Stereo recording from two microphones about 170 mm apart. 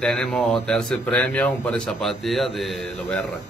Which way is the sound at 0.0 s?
5° left (ahead or behind).